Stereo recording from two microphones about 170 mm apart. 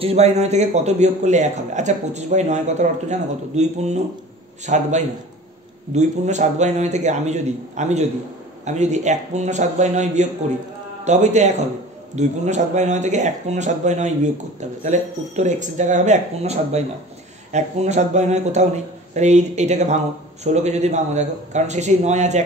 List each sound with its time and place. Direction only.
0.0 s a man's voice: 40° right (ahead or behind)